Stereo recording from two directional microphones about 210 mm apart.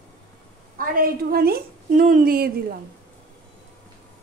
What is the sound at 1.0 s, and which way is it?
A woman's voice, 45° right (ahead or behind).